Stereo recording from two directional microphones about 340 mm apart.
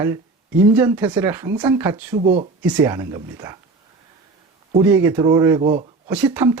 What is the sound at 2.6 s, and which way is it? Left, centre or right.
Speech, centre.